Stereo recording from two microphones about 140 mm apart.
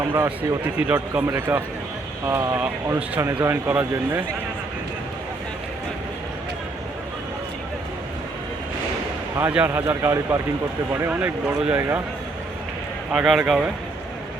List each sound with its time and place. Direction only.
0.0 s speech: 20° right (ahead or behind)
0.8 s a man's voice: 10° right (ahead or behind)
9.4 s a man's voice: 10° right (ahead or behind)
13.1 s speech: 5° right (ahead or behind)